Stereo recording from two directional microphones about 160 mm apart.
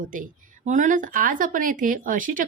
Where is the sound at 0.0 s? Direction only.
55° right (ahead or behind).